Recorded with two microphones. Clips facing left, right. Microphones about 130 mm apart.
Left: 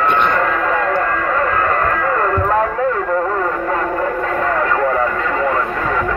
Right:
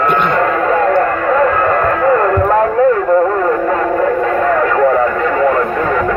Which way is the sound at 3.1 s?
15° right (ahead or behind).